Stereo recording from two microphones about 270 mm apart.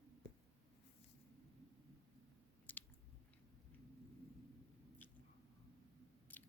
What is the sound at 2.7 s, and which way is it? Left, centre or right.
Chewing, centre.